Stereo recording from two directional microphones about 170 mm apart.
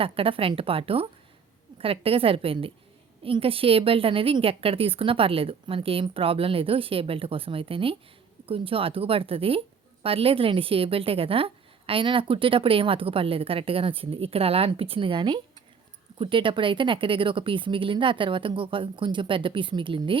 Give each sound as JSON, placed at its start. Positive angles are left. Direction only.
{"t": 0.0, "sound": "a woman's voice", "side_deg": -35}